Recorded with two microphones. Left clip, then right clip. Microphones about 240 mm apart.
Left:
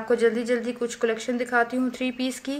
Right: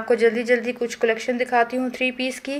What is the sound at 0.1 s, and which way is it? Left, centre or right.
Speech, centre.